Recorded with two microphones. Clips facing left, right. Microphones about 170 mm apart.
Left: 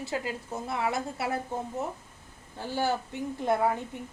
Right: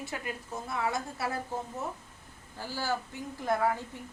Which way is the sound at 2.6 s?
20° left (ahead or behind).